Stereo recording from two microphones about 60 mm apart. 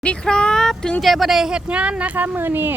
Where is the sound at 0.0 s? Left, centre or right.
Centre.